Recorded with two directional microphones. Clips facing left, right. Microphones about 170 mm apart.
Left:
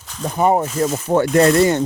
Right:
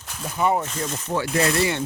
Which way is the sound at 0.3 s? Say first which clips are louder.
Left 6 dB; 40° left (ahead or behind).